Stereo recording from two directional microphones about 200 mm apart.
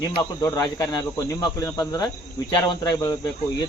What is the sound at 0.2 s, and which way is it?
Speech, 15° left (ahead or behind).